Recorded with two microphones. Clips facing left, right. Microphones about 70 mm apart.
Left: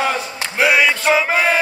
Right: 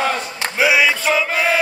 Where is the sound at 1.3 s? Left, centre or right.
Centre.